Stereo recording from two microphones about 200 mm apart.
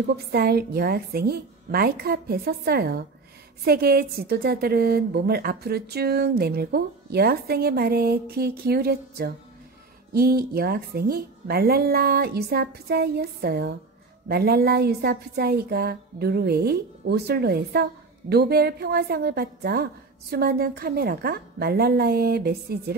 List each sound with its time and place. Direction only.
0.1 s a woman's voice: 55° right (ahead or behind)